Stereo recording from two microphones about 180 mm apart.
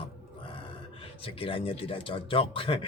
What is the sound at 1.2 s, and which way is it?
Speech, 30° left (ahead or behind).